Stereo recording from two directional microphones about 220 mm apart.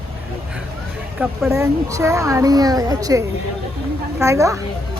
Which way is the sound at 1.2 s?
10° right (ahead or behind).